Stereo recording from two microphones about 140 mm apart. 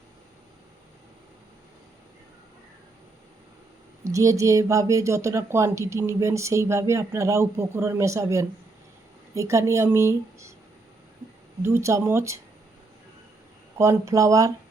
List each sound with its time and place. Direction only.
4.0 s speech: 20° right (ahead or behind)
11.6 s speech: 20° right (ahead or behind)
13.7 s speech: 20° right (ahead or behind)